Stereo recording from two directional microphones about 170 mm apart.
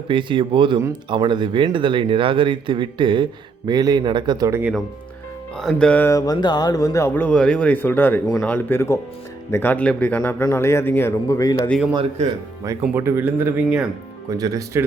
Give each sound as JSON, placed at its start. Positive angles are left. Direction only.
{"t": 0.1, "sound": "speech", "side_deg": -30}
{"t": 5.5, "sound": "speech", "side_deg": 5}
{"t": 12.9, "sound": "speech", "side_deg": -15}
{"t": 14.3, "sound": "speech", "side_deg": -20}